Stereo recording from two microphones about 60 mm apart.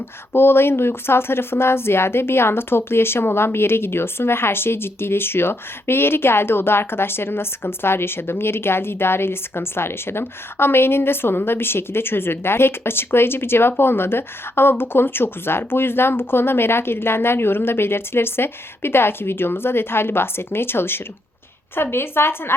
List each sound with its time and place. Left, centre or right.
0.3 s a woman's voice: left